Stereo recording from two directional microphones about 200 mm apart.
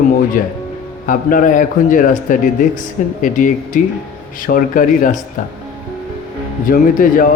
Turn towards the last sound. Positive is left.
turn(degrees=45)  # may be behind; listen again after turning